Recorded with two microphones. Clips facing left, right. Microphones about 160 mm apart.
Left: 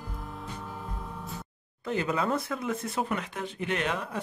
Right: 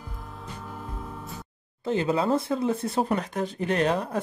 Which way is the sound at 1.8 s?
30° right (ahead or behind).